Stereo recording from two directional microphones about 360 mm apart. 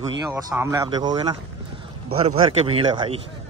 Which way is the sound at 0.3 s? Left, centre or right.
Centre.